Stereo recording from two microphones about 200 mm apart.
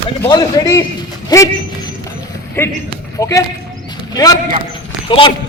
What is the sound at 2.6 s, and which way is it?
A man's voice, 10° left (ahead or behind).